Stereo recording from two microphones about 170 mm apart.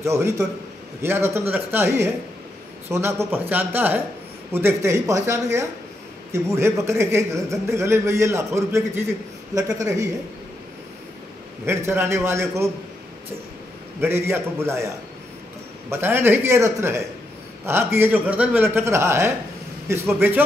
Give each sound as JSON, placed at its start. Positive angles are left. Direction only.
{"t": 0.0, "sound": "a man's voice", "side_deg": -15}
{"t": 11.6, "sound": "a man's voice", "side_deg": -15}
{"t": 14.0, "sound": "a man's voice", "side_deg": -15}
{"t": 15.9, "sound": "a man's voice", "side_deg": -15}